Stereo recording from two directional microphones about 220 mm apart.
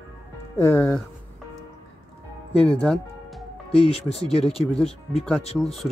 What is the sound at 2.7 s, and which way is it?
Speech, 5° left (ahead or behind).